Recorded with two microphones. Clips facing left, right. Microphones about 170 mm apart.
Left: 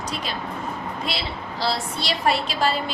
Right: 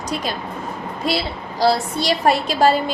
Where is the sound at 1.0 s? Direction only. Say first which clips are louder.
Right 7 dB; 40° right (ahead or behind).